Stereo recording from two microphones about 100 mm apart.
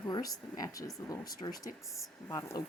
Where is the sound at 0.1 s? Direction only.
40° left (ahead or behind).